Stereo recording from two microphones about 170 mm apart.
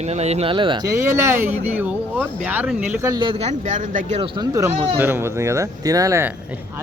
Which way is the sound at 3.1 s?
30° right (ahead or behind).